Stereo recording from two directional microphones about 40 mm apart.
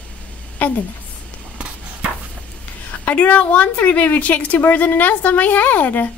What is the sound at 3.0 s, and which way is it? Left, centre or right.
A woman's voice, left.